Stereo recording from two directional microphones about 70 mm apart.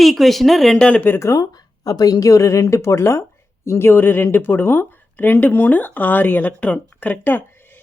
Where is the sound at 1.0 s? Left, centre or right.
Left.